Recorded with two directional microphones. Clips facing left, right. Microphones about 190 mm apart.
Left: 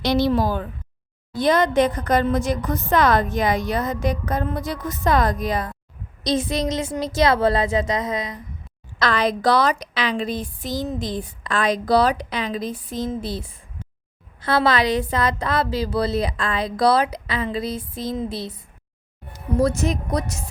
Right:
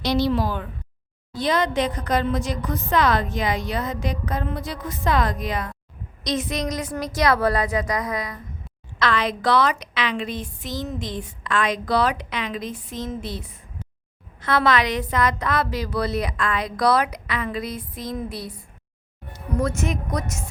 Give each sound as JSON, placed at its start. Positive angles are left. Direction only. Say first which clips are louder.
{"t": 0.0, "sound": "a woman's voice", "louder": "left 2 dB", "side_deg": 55}
{"t": 9.0, "sound": "a woman's voice", "louder": "left 2 dB", "side_deg": 40}
{"t": 19.5, "sound": "a woman's voice", "louder": "left 4 dB", "side_deg": 35}